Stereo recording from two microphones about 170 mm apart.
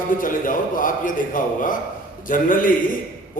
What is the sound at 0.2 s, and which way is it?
A man's voice, 50° left (ahead or behind).